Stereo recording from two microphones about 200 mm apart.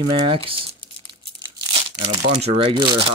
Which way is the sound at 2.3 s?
30° right (ahead or behind).